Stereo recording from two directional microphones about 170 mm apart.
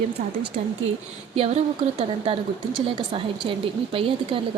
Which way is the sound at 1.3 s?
35° right (ahead or behind).